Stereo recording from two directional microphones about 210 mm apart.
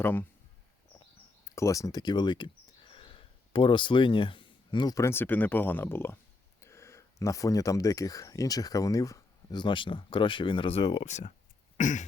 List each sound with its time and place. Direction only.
0.0 s speech: 10° left (ahead or behind)
1.5 s speech: 15° left (ahead or behind); by 11.3 s 35° left (ahead or behind)
11.8 s throat clearing: 35° left (ahead or behind)